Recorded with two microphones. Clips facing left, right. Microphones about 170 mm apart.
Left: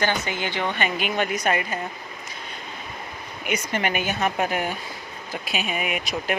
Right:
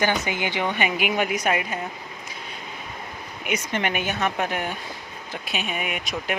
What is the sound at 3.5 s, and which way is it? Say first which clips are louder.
Speech: even; centre (ahead or behind).